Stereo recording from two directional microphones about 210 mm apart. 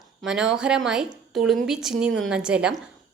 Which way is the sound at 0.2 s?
5° right (ahead or behind).